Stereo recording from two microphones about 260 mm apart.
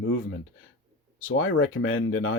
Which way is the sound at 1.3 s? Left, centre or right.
Left.